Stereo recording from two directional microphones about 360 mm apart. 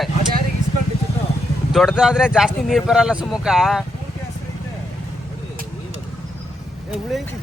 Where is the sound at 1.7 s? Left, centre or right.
Centre.